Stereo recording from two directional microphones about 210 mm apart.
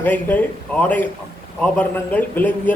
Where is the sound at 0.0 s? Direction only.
10° left (ahead or behind).